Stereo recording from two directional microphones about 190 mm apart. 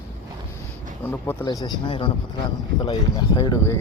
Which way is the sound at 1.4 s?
25° left (ahead or behind).